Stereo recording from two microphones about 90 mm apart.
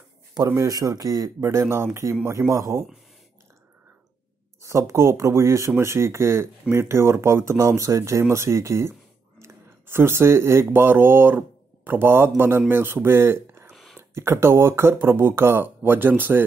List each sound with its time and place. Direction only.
0.5 s speech: 40° right (ahead or behind)
1.4 s speech: 30° right (ahead or behind)
4.6 s speech: 35° right (ahead or behind)
13.7 s a sound: centre (ahead or behind)
13.9 s speech: 30° right (ahead or behind)